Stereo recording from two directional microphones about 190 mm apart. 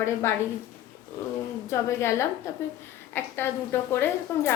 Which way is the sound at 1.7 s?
15° left (ahead or behind).